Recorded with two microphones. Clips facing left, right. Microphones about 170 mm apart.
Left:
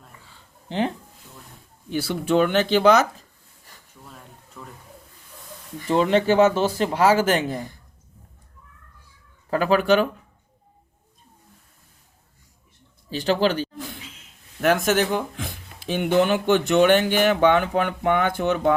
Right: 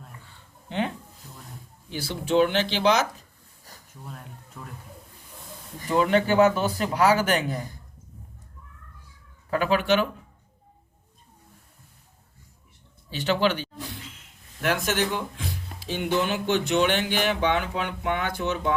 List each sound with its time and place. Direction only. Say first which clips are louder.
0.7 s speech: left 4 dB; 30° left (ahead or behind)
1.9 s speech: left 4 dB; 55° left (ahead or behind)
4.6 s a sound: left 1 dB; centre (ahead or behind)
5.9 s speech: left 3 dB; 30° left (ahead or behind)
9.5 s speech: left 4 dB; 40° left (ahead or behind)
13.1 s speech: left 3 dB; 40° left (ahead or behind)